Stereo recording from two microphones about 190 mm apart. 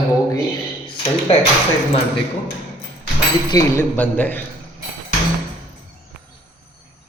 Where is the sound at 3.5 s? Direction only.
15° left (ahead or behind).